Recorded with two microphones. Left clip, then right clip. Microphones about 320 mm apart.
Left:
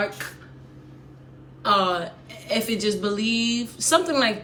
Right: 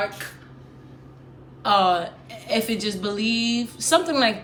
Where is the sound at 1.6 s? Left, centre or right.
Centre.